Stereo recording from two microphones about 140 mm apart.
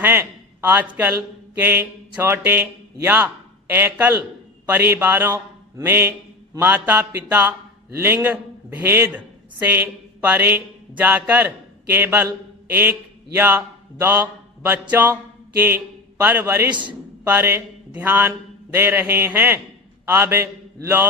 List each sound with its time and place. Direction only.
0.0 s a man's voice: 15° right (ahead or behind)
20.1 s mantra: 15° right (ahead or behind)